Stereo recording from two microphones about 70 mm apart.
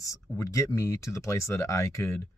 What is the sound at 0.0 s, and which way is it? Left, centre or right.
Speech, left.